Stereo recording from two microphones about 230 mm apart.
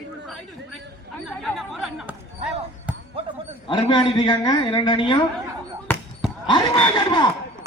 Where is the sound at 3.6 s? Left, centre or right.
Centre.